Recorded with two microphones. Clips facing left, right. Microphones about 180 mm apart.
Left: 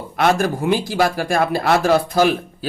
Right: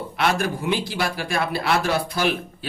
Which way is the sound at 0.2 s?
45° left (ahead or behind).